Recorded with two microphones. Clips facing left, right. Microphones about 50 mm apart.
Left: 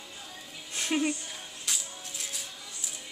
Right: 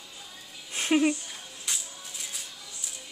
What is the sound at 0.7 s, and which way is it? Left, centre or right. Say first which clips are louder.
Music: right 5 dB; right.